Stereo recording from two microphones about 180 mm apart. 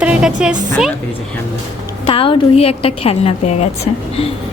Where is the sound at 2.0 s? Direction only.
30° left (ahead or behind).